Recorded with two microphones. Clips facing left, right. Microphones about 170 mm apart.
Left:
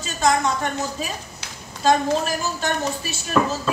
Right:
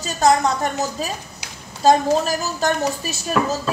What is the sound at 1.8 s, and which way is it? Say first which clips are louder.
A woman's voice: right 3 dB; 40° right (ahead or behind).